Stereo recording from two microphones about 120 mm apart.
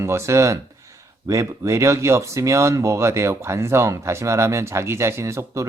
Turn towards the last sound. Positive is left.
turn(degrees=-25)  # may be behind; listen again after turning